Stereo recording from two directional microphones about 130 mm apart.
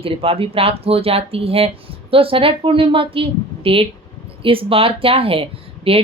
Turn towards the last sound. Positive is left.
turn(degrees=-45)  # may be behind; listen again after turning